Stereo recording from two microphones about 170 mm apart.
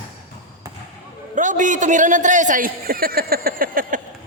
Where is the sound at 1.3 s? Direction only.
50° right (ahead or behind).